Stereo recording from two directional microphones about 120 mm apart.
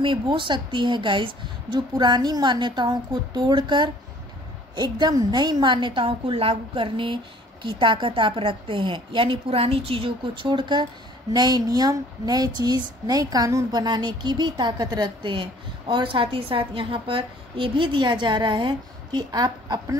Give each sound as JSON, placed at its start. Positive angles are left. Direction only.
{"t": 0.0, "sound": "a woman's voice", "side_deg": -45}